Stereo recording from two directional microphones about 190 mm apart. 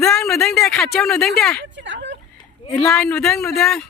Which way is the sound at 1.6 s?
70° right (ahead or behind).